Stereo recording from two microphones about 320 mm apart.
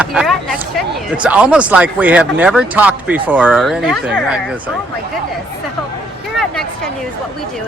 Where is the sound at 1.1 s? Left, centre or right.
Centre.